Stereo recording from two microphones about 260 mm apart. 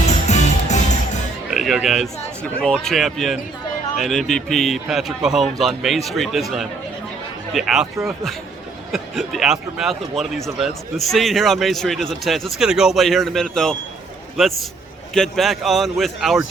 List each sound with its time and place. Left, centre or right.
0.3 s music: left
1.5 s speech: centre
15.1 s speech: centre